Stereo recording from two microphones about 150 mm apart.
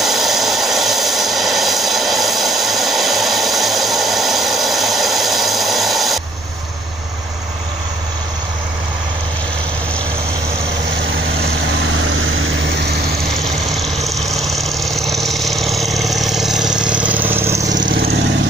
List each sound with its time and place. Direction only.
0.0 s vehicle: centre (ahead or behind)
14.0 s vehicle: centre (ahead or behind)
17.7 s vehicle: 75° right (ahead or behind)